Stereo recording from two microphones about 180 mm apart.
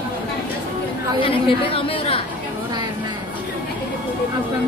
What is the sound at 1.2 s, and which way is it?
A woman's voice, 30° left (ahead or behind).